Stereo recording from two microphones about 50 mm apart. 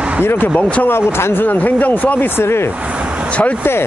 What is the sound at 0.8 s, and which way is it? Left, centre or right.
Speech, left.